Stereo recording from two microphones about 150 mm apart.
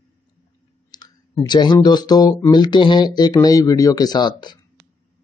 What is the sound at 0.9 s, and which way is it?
Clicking, 25° left (ahead or behind).